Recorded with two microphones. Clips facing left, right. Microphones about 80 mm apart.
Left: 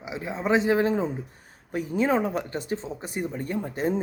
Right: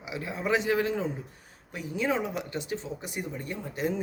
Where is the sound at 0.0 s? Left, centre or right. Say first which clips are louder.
Left 3 dB; left.